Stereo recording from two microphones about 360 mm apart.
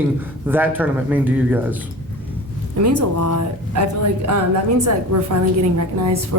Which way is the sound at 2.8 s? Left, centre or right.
Right.